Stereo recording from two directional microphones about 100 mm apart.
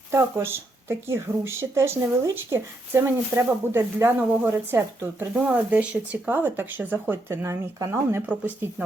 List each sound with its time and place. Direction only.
0.1 s speech: 25° right (ahead or behind)
5.3 s speech: 10° right (ahead or behind)